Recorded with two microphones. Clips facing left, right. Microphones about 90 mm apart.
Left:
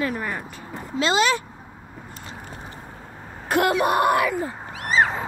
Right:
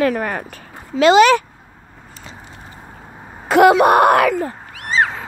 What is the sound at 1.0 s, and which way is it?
Speech, 70° right (ahead or behind).